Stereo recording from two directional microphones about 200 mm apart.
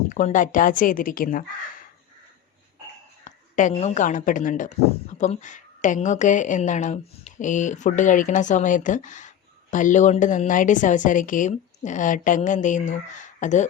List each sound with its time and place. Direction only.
0.1 s speech: 40° left (ahead or behind)
3.2 s a woman's voice: 40° left (ahead or behind)